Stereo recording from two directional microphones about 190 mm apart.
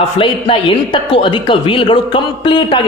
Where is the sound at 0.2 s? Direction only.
30° left (ahead or behind).